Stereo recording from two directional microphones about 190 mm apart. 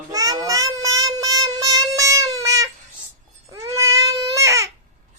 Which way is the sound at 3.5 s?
15° right (ahead or behind).